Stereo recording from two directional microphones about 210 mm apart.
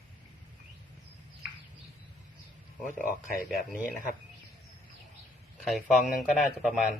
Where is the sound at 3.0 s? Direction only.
40° left (ahead or behind).